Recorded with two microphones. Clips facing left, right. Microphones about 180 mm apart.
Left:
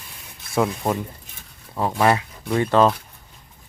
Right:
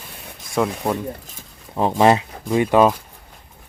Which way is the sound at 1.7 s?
20° right (ahead or behind).